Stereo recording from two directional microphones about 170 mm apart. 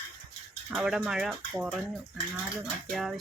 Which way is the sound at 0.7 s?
5° right (ahead or behind).